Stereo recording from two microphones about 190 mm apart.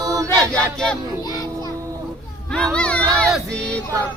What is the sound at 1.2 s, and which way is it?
Music, 20° left (ahead or behind).